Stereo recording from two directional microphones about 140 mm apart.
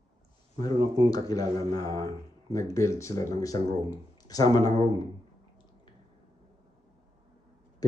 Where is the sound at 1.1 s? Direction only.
25° left (ahead or behind).